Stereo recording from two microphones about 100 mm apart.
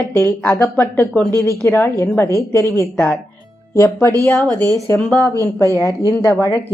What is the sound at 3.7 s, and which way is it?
Speech, 30° left (ahead or behind).